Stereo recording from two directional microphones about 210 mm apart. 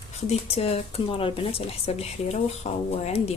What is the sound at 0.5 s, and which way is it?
Speech, 25° left (ahead or behind).